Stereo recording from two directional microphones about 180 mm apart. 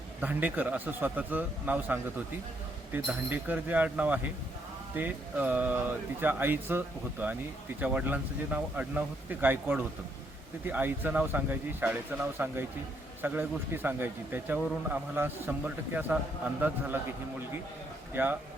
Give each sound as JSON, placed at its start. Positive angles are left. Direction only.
{"t": 0.2, "sound": "speech", "side_deg": -10}
{"t": 18.1, "sound": "speech", "side_deg": -10}